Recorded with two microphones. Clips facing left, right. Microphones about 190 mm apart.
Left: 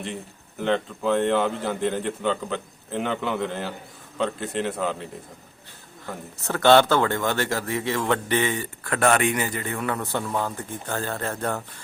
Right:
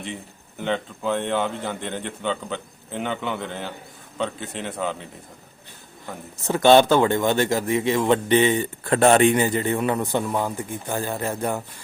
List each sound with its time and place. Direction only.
0.6 s a man's voice: centre (ahead or behind)
6.5 s a man's voice: 15° right (ahead or behind)